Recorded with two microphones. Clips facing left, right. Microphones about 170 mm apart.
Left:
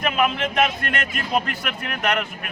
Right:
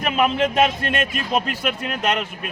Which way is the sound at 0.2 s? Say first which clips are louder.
Right 4 dB; 30° right (ahead or behind).